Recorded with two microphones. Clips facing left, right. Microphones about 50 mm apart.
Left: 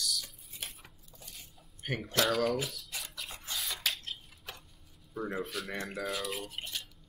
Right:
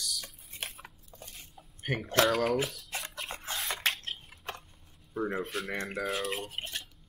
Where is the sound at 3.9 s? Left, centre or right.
Right.